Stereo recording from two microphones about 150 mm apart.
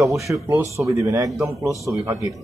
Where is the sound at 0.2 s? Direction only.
20° right (ahead or behind).